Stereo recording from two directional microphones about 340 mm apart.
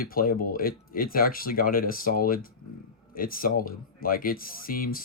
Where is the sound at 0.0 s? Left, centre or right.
Left.